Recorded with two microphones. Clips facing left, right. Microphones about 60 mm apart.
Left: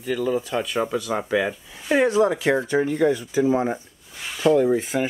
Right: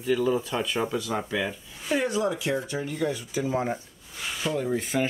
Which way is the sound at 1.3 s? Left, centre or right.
Left.